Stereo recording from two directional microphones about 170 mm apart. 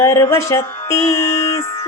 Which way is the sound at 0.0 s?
15° left (ahead or behind).